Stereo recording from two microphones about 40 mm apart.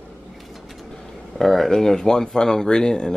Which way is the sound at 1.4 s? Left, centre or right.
Centre.